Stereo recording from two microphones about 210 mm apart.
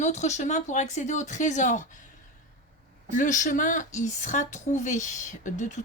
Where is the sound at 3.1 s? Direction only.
35° left (ahead or behind).